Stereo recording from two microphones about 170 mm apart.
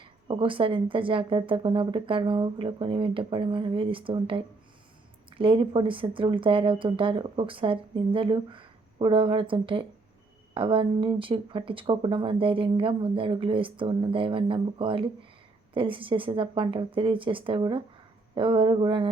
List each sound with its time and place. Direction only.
0.0 s speech: 30° right (ahead or behind)